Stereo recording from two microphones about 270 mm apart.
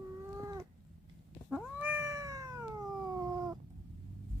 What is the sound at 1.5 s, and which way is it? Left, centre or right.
Cat, centre.